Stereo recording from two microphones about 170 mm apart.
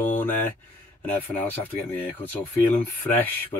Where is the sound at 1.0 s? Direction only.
10° left (ahead or behind).